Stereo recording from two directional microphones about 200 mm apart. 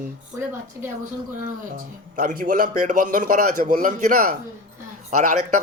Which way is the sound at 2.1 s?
45° right (ahead or behind).